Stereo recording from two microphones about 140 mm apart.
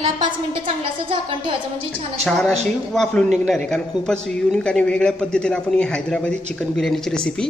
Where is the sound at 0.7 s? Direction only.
40° right (ahead or behind).